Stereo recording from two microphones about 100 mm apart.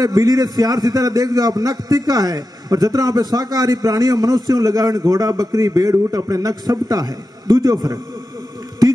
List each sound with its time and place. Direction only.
0.0 s a man's voice: 40° right (ahead or behind)